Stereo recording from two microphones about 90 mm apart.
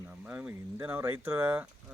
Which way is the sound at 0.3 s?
15° right (ahead or behind).